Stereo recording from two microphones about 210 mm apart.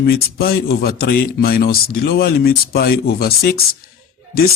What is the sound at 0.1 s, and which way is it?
Speech, 45° left (ahead or behind).